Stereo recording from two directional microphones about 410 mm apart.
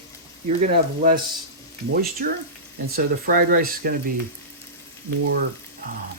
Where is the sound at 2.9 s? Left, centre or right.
Right.